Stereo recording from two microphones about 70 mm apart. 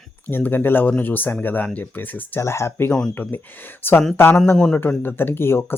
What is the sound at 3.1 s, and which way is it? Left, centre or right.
Speech, left.